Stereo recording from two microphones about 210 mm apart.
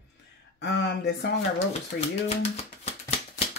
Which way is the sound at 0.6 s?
55° left (ahead or behind).